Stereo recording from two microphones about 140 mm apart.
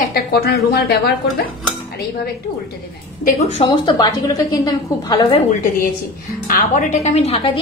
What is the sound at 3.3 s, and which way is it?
Speech, 50° left (ahead or behind).